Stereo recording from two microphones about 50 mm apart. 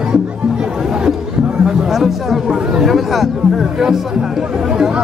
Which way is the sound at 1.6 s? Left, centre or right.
Centre.